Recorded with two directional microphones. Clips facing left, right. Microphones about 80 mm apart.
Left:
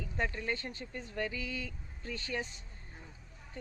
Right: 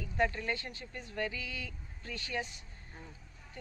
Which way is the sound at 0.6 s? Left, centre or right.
Left.